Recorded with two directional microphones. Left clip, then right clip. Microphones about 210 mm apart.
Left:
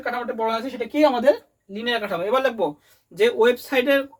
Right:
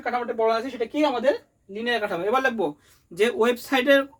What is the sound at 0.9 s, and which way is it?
Speech, centre (ahead or behind).